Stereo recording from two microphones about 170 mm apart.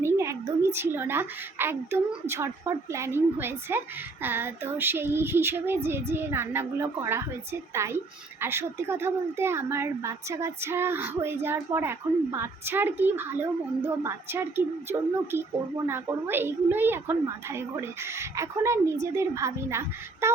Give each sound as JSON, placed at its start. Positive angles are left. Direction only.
{"t": 0.0, "sound": "a woman's voice", "side_deg": -15}